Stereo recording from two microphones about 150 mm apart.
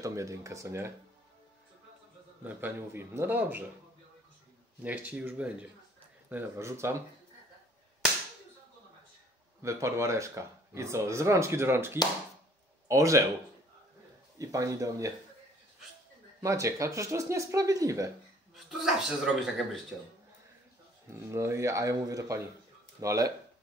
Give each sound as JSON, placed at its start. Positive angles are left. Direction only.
{"t": 0.0, "sound": "speech", "side_deg": -20}
{"t": 2.4, "sound": "speech", "side_deg": -15}
{"t": 4.8, "sound": "speech", "side_deg": -10}
{"t": 9.6, "sound": "speech", "side_deg": -20}
{"t": 14.4, "sound": "speech", "side_deg": -20}
{"t": 16.3, "sound": "speech", "side_deg": -20}
{"t": 18.5, "sound": "a man's voice", "side_deg": 0}
{"t": 21.1, "sound": "speech", "side_deg": -20}